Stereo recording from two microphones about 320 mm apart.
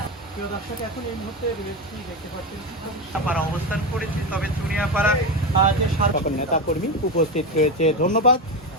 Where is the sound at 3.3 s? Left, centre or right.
Centre.